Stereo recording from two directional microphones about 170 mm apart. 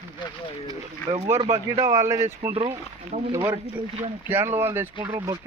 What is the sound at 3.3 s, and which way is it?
Speech, 15° right (ahead or behind).